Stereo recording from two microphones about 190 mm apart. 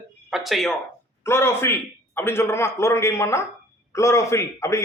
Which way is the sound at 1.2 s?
15° left (ahead or behind).